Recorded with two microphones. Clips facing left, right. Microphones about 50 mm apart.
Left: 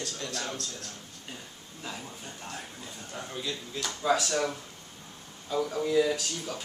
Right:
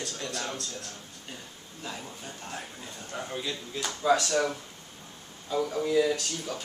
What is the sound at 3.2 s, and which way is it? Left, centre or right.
Speech, centre.